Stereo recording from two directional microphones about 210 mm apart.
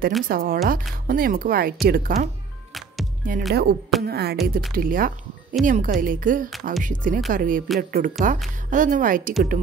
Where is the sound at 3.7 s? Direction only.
50° right (ahead or behind).